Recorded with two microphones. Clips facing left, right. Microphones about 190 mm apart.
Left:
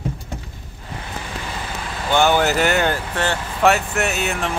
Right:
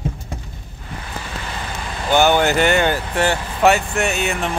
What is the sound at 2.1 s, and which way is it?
Speech, centre (ahead or behind).